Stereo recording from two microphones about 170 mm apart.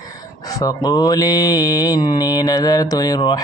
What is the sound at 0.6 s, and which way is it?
Mantra, 25° left (ahead or behind).